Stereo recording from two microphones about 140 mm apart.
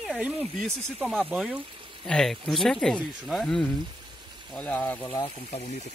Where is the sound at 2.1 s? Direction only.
5° left (ahead or behind).